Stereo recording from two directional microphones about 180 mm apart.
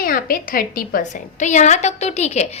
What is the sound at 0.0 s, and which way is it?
A woman's voice, 50° left (ahead or behind).